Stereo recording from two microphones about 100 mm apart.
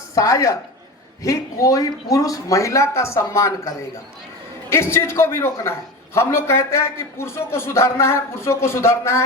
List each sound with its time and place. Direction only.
0.1 s a woman's voice: 30° left (ahead or behind)